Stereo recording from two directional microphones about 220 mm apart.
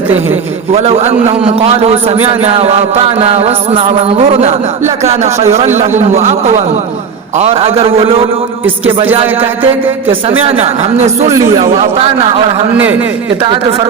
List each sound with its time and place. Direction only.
0.7 s chant: 25° right (ahead or behind)
6.0 s a man's voice: 30° right (ahead or behind)
7.3 s chant: 25° right (ahead or behind)
10.1 s chant: 25° right (ahead or behind)
11.3 s speech: 15° right (ahead or behind)
11.8 s chant: 25° right (ahead or behind)